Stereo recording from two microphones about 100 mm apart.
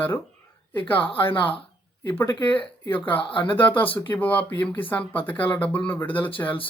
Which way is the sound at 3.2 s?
60° left (ahead or behind).